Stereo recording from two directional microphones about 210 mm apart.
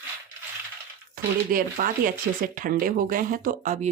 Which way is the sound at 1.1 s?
40° right (ahead or behind).